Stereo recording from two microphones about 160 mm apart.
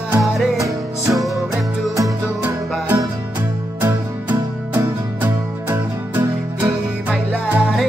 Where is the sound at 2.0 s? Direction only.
20° right (ahead or behind).